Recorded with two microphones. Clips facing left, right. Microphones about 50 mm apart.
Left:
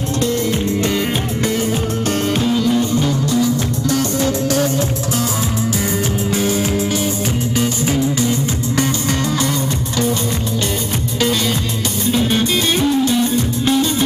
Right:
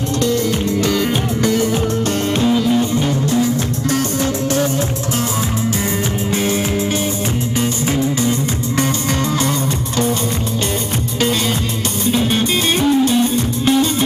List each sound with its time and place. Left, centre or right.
0.8 s music: centre
2.3 s music: centre
3.0 s music: right
6.3 s music: right
13.1 s music: right